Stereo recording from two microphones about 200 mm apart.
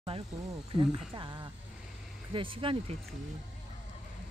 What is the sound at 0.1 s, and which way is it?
Speech, 30° right (ahead or behind).